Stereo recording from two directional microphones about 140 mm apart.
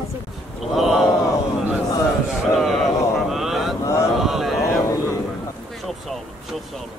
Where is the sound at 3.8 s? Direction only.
25° left (ahead or behind).